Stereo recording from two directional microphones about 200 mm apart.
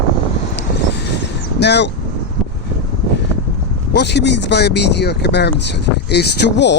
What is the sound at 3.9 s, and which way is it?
Speech, 60° left (ahead or behind).